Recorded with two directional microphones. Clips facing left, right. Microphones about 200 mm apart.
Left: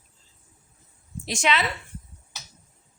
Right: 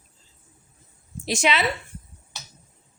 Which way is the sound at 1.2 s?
5° right (ahead or behind).